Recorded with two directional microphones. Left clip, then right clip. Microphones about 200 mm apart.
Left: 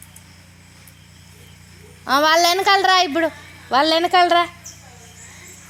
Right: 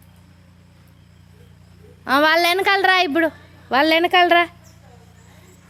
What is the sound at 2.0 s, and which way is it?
A woman's voice, 25° right (ahead or behind).